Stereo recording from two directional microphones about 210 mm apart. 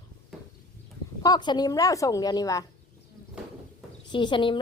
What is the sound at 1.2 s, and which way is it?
A woman's voice, 20° left (ahead or behind).